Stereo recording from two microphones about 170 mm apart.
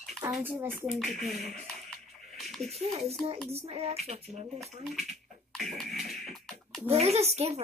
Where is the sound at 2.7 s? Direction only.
35° right (ahead or behind).